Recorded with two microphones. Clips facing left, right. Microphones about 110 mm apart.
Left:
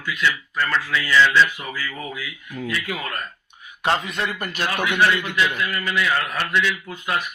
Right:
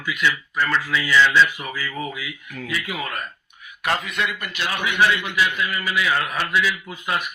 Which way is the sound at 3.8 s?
30° left (ahead or behind).